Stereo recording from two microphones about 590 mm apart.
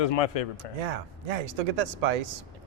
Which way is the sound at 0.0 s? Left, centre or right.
Left.